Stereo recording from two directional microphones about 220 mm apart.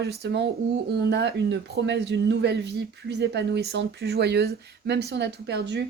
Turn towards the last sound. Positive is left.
turn(degrees=-50)  # may be behind; listen again after turning